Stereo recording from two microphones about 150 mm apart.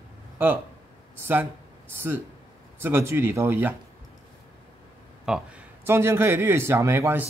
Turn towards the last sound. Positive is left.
turn(degrees=-15)  # may be behind; listen again after turning